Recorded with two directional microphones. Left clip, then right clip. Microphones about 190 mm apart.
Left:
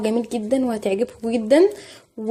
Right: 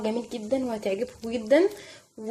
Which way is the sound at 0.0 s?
25° left (ahead or behind).